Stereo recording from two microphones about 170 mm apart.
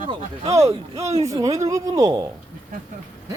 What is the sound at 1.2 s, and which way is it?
Speech, 20° right (ahead or behind).